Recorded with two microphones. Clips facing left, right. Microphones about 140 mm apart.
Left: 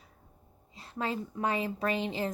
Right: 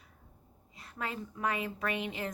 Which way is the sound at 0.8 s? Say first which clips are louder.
Left 5 dB; 30° left (ahead or behind).